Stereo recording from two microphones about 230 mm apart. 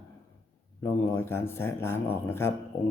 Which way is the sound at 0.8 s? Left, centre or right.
Centre.